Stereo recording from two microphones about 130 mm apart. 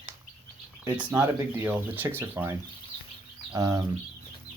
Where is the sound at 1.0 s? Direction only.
15° right (ahead or behind).